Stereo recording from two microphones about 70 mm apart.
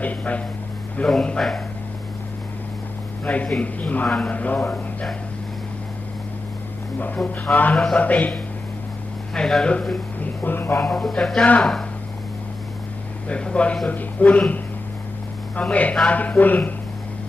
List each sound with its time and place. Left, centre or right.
0.0 s speech: left; by 1.6 s centre
3.2 s speech: centre
7.2 s speech: centre
7.5 s speech: left
9.3 s speech: centre
10.4 s speech: left
10.8 s speech: centre
13.2 s speech: centre